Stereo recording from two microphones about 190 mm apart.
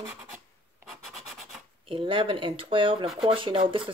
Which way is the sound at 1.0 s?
Centre (ahead or behind).